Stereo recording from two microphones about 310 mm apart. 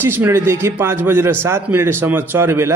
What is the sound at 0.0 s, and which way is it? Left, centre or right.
A man's voice, centre.